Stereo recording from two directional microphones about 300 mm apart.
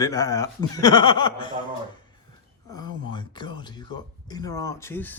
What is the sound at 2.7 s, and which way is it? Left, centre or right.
Speech, centre.